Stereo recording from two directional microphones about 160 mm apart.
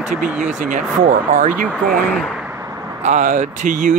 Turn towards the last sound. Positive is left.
turn(degrees=-55)  # may be behind; listen again after turning